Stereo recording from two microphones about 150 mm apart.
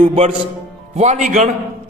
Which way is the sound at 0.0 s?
35° right (ahead or behind).